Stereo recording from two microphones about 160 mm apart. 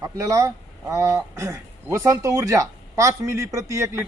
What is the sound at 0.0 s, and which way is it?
A man's voice, 20° right (ahead or behind).